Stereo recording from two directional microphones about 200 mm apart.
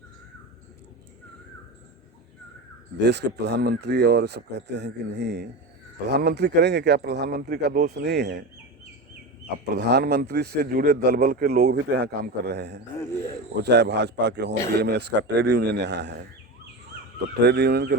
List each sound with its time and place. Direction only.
3.0 s speech: 55° right (ahead or behind)
9.7 s speech: 55° right (ahead or behind)
17.2 s speech: 55° right (ahead or behind)